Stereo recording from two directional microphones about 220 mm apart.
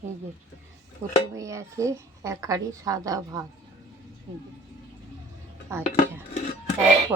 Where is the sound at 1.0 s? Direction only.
10° right (ahead or behind).